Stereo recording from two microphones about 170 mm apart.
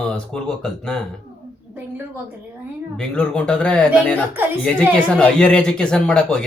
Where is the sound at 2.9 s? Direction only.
5° left (ahead or behind).